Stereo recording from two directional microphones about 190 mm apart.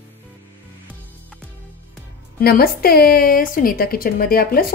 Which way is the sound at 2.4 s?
50° left (ahead or behind).